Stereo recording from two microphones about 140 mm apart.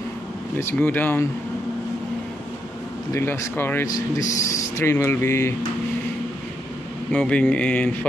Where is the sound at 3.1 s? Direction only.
20° left (ahead or behind).